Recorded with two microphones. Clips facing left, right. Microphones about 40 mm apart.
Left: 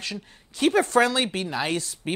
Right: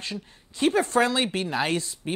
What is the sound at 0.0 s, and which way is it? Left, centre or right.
Speech, left.